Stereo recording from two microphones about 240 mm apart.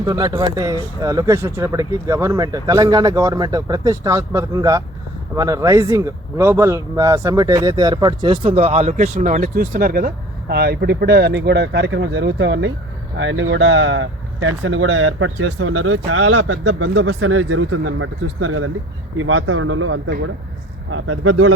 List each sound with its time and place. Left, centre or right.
0.0 s speech: centre; by 21.5 s right